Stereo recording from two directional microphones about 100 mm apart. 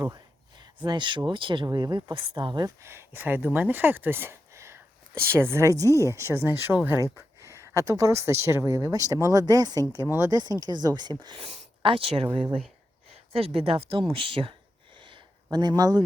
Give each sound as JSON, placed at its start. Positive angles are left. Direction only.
{"t": 0.9, "sound": "speech", "side_deg": -50}
{"t": 2.8, "sound": "speech", "side_deg": -25}
{"t": 5.9, "sound": "speech", "side_deg": 30}
{"t": 6.1, "sound": "speech", "side_deg": -25}
{"t": 10.1, "sound": "speech", "side_deg": -25}
{"t": 10.3, "sound": "speech", "side_deg": -40}
{"t": 11.3, "sound": "speech", "side_deg": -65}
{"t": 13.3, "sound": "speech", "side_deg": -70}
{"t": 15.5, "sound": "speech", "side_deg": -40}